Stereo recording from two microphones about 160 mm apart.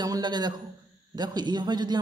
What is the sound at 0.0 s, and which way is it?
A man's voice, 25° right (ahead or behind).